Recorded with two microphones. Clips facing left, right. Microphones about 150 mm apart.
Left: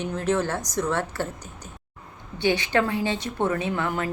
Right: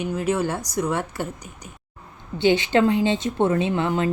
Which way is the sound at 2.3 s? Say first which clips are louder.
Right 4 dB; 20° right (ahead or behind).